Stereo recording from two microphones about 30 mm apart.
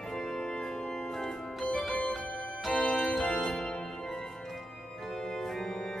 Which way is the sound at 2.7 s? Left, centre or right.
Left.